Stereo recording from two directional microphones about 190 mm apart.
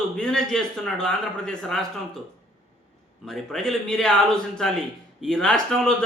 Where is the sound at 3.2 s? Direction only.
Centre (ahead or behind).